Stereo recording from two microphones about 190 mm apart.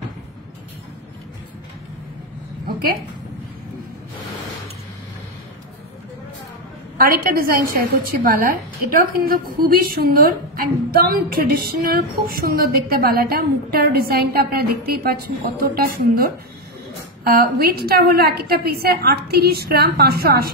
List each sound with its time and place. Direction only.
7.0 s a woman's voice: 50° right (ahead or behind)